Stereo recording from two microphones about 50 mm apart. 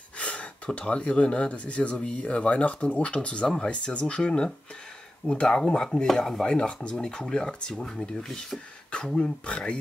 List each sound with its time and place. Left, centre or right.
0.2 s gasp: left
0.7 s speech: left; by 8.5 s centre
8.9 s speech: centre